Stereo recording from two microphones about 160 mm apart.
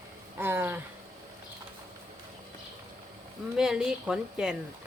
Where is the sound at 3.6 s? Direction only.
5° right (ahead or behind).